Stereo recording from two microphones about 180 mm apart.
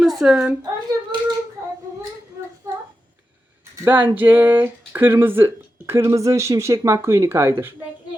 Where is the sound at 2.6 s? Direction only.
15° right (ahead or behind).